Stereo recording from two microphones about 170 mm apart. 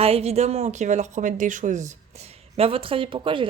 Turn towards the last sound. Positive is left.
turn(degrees=-30)  # may be behind; listen again after turning